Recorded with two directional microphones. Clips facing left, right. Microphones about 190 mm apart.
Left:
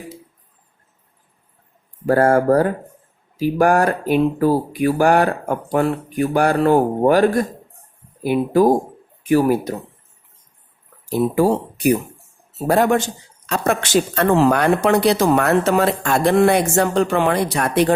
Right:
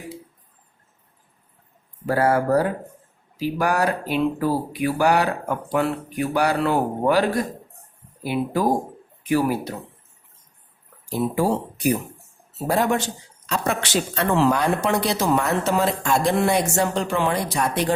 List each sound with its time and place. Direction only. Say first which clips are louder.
2.0 s speech: left 5 dB; 50° left (ahead or behind)
11.3 s speech: left 5 dB; 65° left (ahead or behind); by 14.5 s 45° left (ahead or behind)
14.5 s speech: left 5 dB; 65° left (ahead or behind)